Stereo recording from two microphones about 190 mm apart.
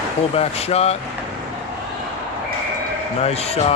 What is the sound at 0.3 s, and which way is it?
Speech, 35° left (ahead or behind).